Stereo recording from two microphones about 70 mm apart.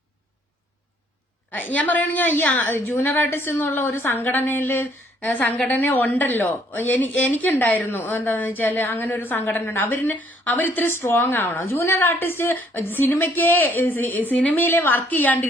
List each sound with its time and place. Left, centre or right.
1.5 s a woman's voice: left